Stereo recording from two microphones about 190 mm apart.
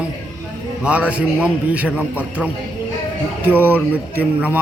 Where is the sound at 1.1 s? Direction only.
5° right (ahead or behind).